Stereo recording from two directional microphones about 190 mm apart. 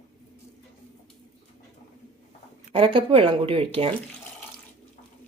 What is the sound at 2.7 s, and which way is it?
Speech, 30° right (ahead or behind).